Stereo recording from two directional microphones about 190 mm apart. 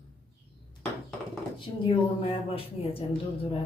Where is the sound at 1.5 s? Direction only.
30° left (ahead or behind).